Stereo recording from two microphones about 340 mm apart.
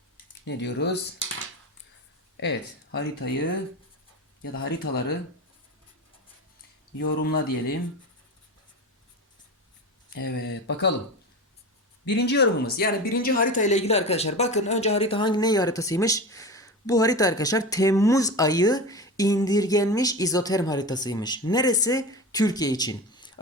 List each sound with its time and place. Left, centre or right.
0.4 s speech: left
2.4 s speech: left
4.5 s speech: left
7.0 s speech: left
10.2 s speech: left
12.0 s speech: left; by 23.3 s centre